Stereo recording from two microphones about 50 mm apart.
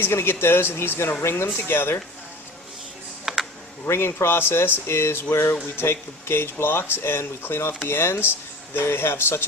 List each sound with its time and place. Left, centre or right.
0.0 s speech: left
1.5 s speech: left
3.3 s computer keyboard: centre
3.8 s speech: left